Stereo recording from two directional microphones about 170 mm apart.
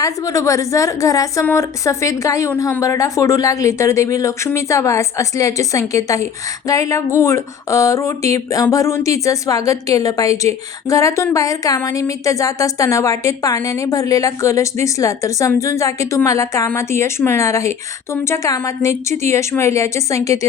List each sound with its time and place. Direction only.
0.0 s speech: 20° left (ahead or behind)